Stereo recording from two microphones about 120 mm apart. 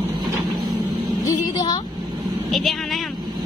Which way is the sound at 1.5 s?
35° left (ahead or behind).